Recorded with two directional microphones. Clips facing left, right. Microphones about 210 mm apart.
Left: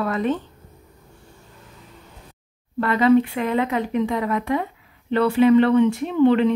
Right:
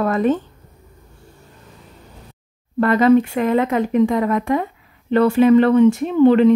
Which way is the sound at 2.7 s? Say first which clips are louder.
Right 3 dB; 45° right (ahead or behind).